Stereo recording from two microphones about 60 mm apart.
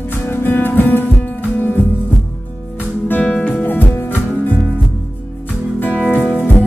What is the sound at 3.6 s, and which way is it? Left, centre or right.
Music, left.